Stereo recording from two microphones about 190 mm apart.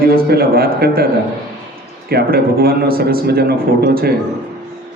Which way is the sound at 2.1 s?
55° right (ahead or behind).